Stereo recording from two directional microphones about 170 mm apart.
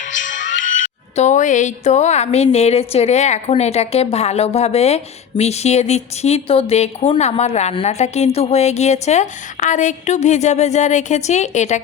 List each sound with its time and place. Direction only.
0.0 s speech: 50° left (ahead or behind)